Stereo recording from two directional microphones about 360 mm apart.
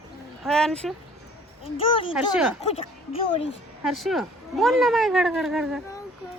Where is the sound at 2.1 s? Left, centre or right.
Centre.